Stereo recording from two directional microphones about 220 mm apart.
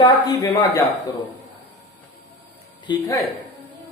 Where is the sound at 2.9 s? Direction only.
20° left (ahead or behind).